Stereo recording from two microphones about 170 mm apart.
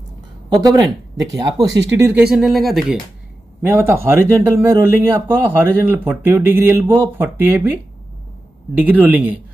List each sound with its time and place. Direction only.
0.5 s speech: 25° right (ahead or behind)
2.2 s speech: centre (ahead or behind)
3.7 s speech: 15° right (ahead or behind)
8.7 s speech: 10° right (ahead or behind)